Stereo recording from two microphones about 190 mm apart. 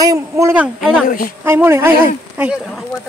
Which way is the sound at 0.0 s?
15° right (ahead or behind).